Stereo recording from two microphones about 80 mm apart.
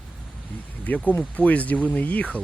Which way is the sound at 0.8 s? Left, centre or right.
Centre.